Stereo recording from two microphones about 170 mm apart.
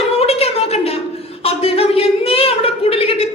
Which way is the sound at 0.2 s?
35° left (ahead or behind).